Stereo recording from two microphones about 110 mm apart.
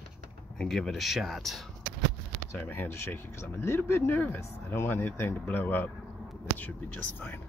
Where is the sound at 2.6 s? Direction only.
20° left (ahead or behind).